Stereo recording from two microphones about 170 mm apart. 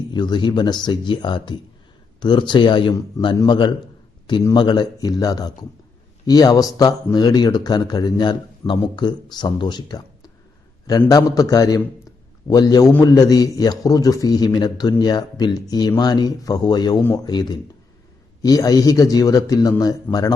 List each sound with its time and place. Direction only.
0.1 s speech: 25° left (ahead or behind)
11.1 s speech: 20° left (ahead or behind)